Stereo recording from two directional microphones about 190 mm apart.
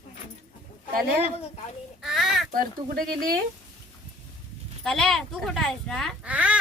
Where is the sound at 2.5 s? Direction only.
45° right (ahead or behind).